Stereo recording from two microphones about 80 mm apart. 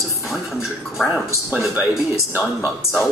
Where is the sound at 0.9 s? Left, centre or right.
Centre.